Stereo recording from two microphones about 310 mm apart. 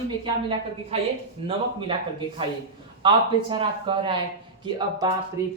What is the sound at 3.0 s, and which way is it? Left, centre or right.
Speech, centre.